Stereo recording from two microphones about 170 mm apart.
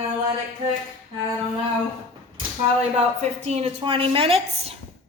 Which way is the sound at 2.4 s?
40° right (ahead or behind).